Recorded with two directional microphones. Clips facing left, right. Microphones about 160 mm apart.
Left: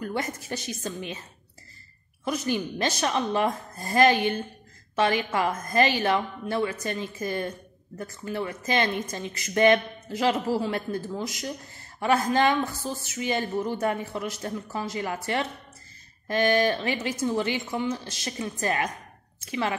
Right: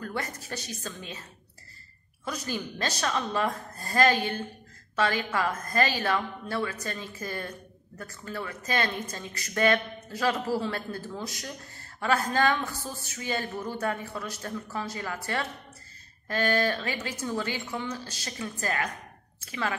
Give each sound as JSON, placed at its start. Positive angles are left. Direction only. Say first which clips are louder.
{"t": 0.0, "sound": "a woman's voice", "louder": "left 4 dB", "side_deg": 20}
{"t": 2.2, "sound": "a woman's voice", "louder": "left 6 dB", "side_deg": 20}
{"t": 16.3, "sound": "a woman's voice", "louder": "left 4 dB", "side_deg": 20}